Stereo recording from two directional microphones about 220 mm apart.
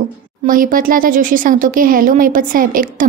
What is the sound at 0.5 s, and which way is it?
A woman's voice, 40° right (ahead or behind).